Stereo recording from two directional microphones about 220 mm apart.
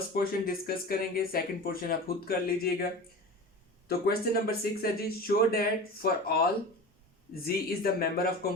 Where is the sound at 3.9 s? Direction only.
45° left (ahead or behind).